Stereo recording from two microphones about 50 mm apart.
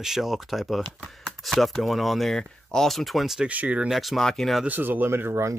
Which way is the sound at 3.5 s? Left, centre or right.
Right.